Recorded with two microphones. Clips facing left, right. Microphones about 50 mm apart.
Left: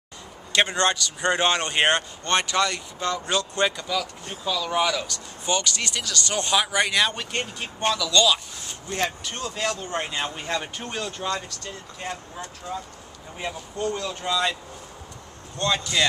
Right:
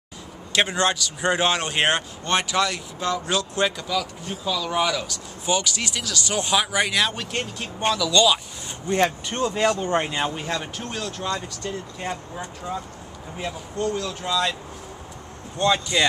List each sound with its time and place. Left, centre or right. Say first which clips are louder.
0.5 s speech: even; centre
8.8 s speech: right 6 dB; right
10.0 s speech: right 3 dB; centre
11.3 s speech: right 3 dB; centre
13.4 s speech: right 2 dB; centre
15.5 s speech: right 3 dB; centre